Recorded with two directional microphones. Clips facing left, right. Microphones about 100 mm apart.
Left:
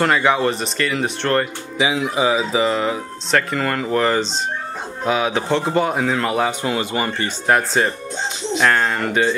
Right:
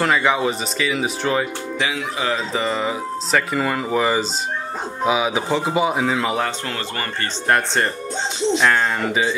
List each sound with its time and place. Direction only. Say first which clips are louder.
0.0 s speech: left 2 dB; centre (ahead or behind)
1.8 s speech: left 6 dB; 20° left (ahead or behind)
2.3 s speech: left 4 dB; 5° left (ahead or behind)
6.6 s speech: left 6 dB; 15° left (ahead or behind)
7.4 s speech: left 2 dB; centre (ahead or behind)